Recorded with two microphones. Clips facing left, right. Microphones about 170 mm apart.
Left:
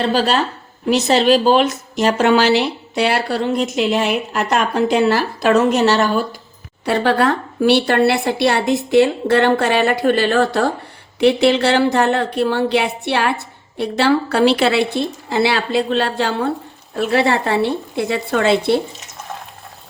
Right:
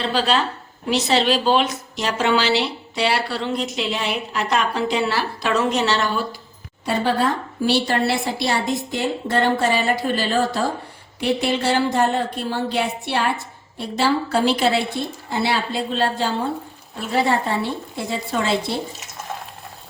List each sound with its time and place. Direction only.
0.0 s a woman's voice: 45° left (ahead or behind)
6.8 s a woman's voice: 70° left (ahead or behind)
13.7 s a woman's voice: 65° left (ahead or behind)
16.9 s a woman's voice: 80° left; by 18.8 s 65° left (ahead or behind)